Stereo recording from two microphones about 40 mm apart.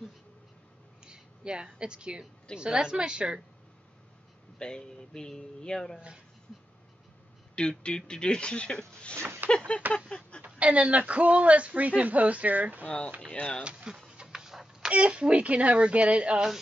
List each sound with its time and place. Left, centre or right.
1.0 s a woman's voice: right
4.6 s speech: left
7.5 s speech: left
9.2 s a sound: right
9.9 s a sound: left
10.4 s speech: right
12.8 s speech: left
13.6 s a sound: centre
14.9 s speech: right